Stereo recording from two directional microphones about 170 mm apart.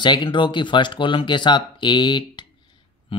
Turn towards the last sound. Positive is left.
turn(degrees=30)  # may be behind; listen again after turning